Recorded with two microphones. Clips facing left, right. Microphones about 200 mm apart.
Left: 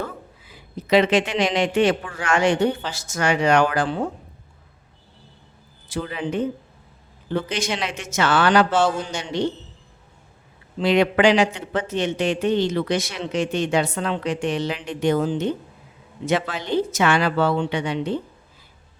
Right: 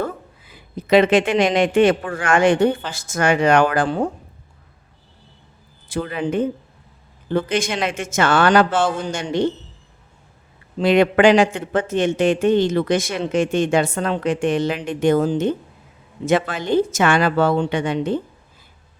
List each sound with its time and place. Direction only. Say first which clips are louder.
0.5 s speech: right 3 dB; 55° right (ahead or behind)
5.9 s speech: right 4 dB; 50° right (ahead or behind)
10.8 s speech: right 3 dB; 50° right (ahead or behind)